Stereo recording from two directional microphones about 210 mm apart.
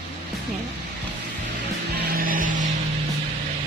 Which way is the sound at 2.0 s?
45° right (ahead or behind).